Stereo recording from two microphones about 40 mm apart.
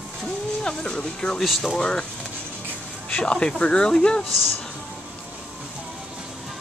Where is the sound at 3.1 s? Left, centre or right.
Left.